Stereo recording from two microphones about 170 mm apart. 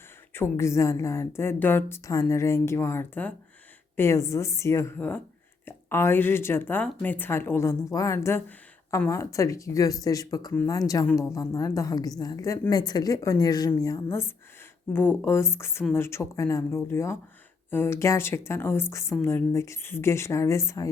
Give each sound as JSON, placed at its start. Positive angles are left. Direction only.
{"t": 0.3, "sound": "a woman's voice", "side_deg": 15}